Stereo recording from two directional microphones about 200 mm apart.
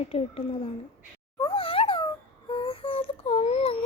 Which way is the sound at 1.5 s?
25° left (ahead or behind).